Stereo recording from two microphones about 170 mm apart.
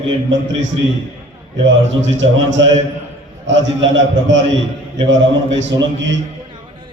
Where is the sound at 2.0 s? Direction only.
90° right.